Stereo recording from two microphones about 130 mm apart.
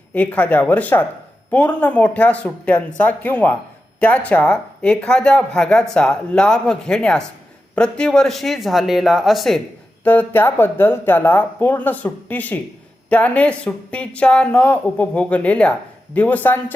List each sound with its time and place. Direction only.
0.1 s speech: 10° left (ahead or behind)
10.0 s speech: 15° left (ahead or behind)